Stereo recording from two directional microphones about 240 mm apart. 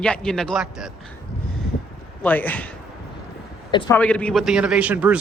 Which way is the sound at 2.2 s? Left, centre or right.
Centre.